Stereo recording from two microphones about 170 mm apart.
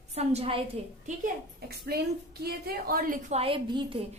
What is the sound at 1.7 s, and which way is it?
A woman's voice, 70° right (ahead or behind).